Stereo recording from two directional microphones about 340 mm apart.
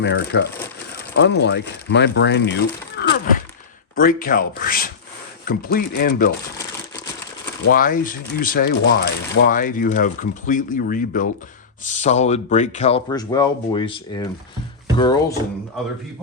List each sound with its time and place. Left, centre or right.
0.0 s speech: left
3.0 s a sound: left
3.9 s speech: left
7.7 s speech: left